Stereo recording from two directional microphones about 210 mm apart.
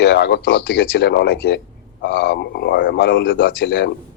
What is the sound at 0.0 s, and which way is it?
Speech, 55° left (ahead or behind).